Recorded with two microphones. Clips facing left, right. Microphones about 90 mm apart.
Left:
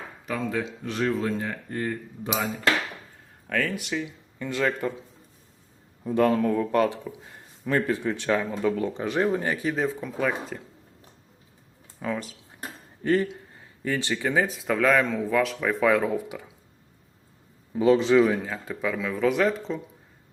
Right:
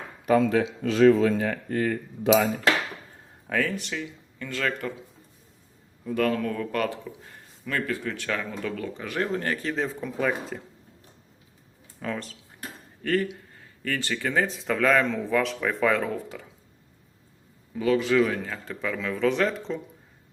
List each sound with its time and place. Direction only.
0.3 s speech: 70° right (ahead or behind); by 2.3 s 90° right
3.4 s speech: 5° right (ahead or behind); by 4.9 s 20° left (ahead or behind)
6.1 s speech: 25° left (ahead or behind); by 10.6 s centre (ahead or behind)
11.9 s speech: 5° left (ahead or behind)
13.0 s speech: 20° left (ahead or behind)
17.7 s speech: 25° left (ahead or behind)
18.4 s speech: 10° left (ahead or behind)